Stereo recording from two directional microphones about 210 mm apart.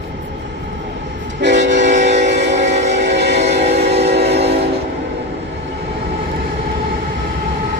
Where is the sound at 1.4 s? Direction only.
55° right (ahead or behind).